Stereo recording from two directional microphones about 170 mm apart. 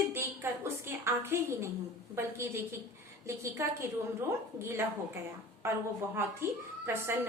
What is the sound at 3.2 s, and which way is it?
Speech, 15° right (ahead or behind).